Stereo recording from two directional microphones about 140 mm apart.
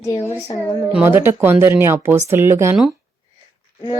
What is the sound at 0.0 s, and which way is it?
Speech, 20° left (ahead or behind).